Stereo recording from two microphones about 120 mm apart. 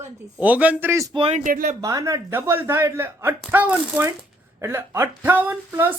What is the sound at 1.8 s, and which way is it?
Speech, 30° right (ahead or behind).